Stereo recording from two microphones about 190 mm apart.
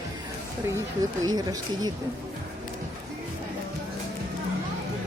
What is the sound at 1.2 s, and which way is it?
Speech, 20° right (ahead or behind).